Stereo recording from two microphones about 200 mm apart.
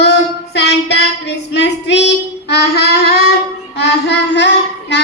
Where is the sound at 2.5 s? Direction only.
55° left (ahead or behind).